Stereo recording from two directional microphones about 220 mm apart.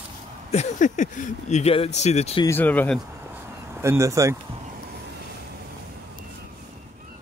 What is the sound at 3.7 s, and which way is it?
Speech, 10° right (ahead or behind).